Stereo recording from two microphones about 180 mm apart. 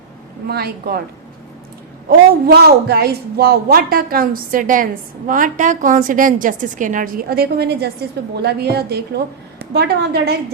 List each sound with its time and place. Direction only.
0.4 s a woman's voice: 60° right (ahead or behind)
2.0 s a man's voice: 60° right (ahead or behind)